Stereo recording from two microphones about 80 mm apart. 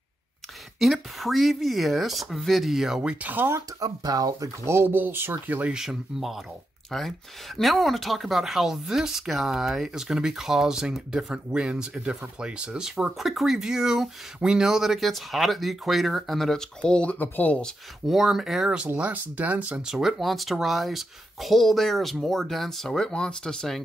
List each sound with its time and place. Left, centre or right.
0.7 s speech: centre
3.8 s speech: right
4.6 s speech: right
5.7 s speech: centre
16.8 s speech: centre
17.6 s speech: centre
18.9 s speech: centre
19.8 s speech: centre